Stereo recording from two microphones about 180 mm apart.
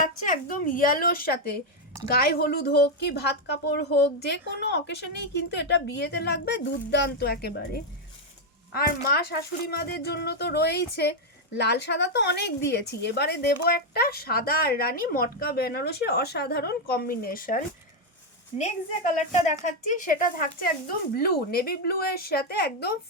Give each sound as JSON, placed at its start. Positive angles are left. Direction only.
{"t": 0.0, "sound": "a woman's voice", "side_deg": 50}
{"t": 9.1, "sound": "a woman's voice", "side_deg": 60}
{"t": 19.3, "sound": "a woman's voice", "side_deg": 40}